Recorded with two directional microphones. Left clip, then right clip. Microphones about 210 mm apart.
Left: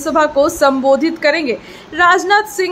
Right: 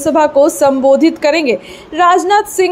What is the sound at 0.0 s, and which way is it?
A woman's voice, 15° right (ahead or behind).